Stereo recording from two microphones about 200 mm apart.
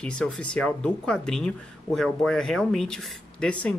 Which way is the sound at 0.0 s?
5° left (ahead or behind).